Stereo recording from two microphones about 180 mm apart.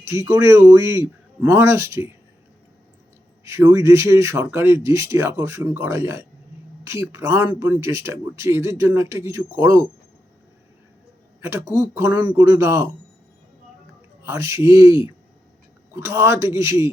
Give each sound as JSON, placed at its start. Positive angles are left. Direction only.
{"t": 0.0, "sound": "speech", "side_deg": -15}
{"t": 3.4, "sound": "speech", "side_deg": -15}
{"t": 11.3, "sound": "speech", "side_deg": -15}
{"t": 14.3, "sound": "speech", "side_deg": -15}